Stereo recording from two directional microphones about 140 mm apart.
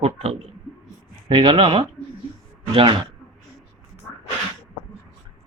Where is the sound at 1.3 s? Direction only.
35° right (ahead or behind).